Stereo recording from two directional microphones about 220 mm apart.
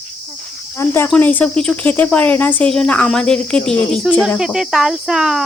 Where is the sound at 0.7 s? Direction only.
10° left (ahead or behind).